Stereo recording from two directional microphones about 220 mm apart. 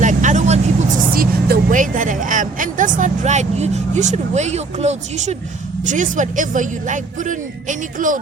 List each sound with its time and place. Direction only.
0.0 s vehicle: 35° right (ahead or behind)
5.8 s speech: 35° right (ahead or behind)